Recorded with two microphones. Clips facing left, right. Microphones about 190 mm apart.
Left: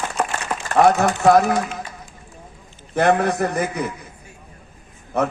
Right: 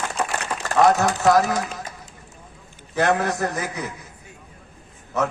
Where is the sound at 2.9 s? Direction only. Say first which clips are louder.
Left 3 dB; 55° left (ahead or behind).